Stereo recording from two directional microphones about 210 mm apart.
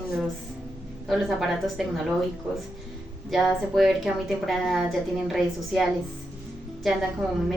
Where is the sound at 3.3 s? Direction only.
Centre (ahead or behind).